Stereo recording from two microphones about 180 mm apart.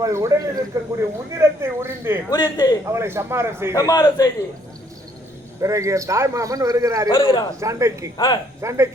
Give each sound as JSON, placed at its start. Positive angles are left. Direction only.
{"t": 0.0, "sound": "a man's voice", "side_deg": -15}
{"t": 2.3, "sound": "a man's voice", "side_deg": 20}
{"t": 2.8, "sound": "a man's voice", "side_deg": -15}
{"t": 3.8, "sound": "a man's voice", "side_deg": 20}
{"t": 5.5, "sound": "a man's voice", "side_deg": -15}
{"t": 7.1, "sound": "a man's voice", "side_deg": 30}
{"t": 7.6, "sound": "a man's voice", "side_deg": -15}